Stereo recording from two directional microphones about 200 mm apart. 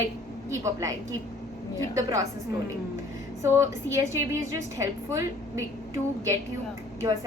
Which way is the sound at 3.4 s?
15° right (ahead or behind).